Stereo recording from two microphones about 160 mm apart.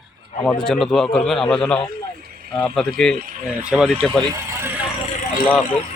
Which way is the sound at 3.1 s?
60° right (ahead or behind).